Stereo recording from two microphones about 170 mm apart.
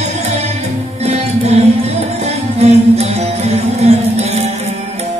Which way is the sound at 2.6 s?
40° right (ahead or behind).